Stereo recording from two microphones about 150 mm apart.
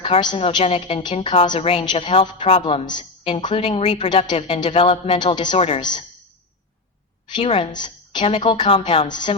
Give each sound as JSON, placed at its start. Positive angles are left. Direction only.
{"t": 0.0, "sound": "a woman's voice", "side_deg": 35}
{"t": 5.5, "sound": "a woman's voice", "side_deg": 40}
{"t": 5.8, "sound": "a woman's voice", "side_deg": 30}
{"t": 7.3, "sound": "a woman's voice", "side_deg": 35}